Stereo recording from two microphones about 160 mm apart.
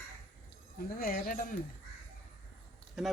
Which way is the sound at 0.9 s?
65° left (ahead or behind).